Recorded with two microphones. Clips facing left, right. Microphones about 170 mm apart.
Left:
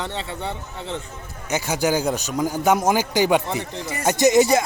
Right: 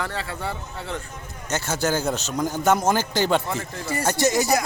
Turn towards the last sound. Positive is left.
turn(degrees=20)  # may be behind; listen again after turning